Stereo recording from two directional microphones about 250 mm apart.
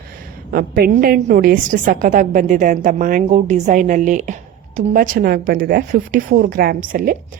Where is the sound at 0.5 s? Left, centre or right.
Right.